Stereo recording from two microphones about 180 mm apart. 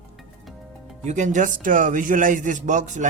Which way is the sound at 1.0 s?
40° right (ahead or behind).